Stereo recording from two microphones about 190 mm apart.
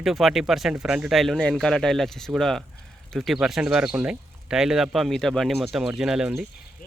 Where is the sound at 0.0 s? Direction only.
Centre (ahead or behind).